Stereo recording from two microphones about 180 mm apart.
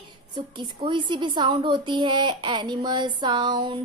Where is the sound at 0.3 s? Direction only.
25° right (ahead or behind).